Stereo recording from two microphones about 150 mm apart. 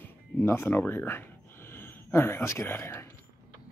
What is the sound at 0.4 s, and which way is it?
Speech, 15° left (ahead or behind).